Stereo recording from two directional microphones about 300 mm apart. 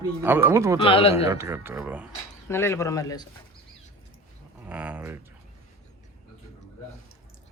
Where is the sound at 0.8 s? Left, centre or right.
Centre.